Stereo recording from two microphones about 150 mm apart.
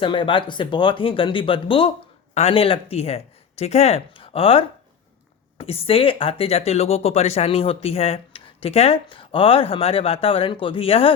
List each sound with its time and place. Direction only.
0.0 s speech: 35° left (ahead or behind)